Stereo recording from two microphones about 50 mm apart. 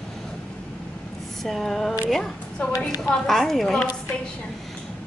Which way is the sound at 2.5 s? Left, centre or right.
Centre.